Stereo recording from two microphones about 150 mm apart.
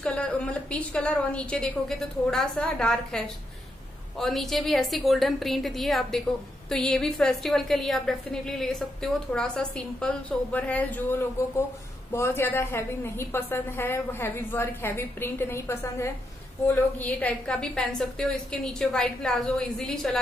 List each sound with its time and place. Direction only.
0.0 s a woman's voice: 10° left (ahead or behind)